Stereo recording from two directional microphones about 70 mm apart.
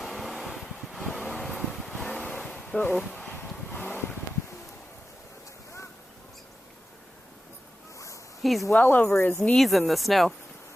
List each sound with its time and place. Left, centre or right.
0.0 s mechanical fan: centre
1.0 s vehicle: centre
2.0 s waves: centre
2.6 s a sound: left
3.7 s vehicle: left
7.9 s a sound: left
8.4 s speech: centre
9.0 s speech: left
9.4 s speech: centre